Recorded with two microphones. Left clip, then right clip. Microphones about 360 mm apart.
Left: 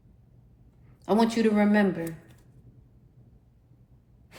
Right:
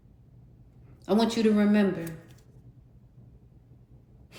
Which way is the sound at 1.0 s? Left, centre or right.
Left.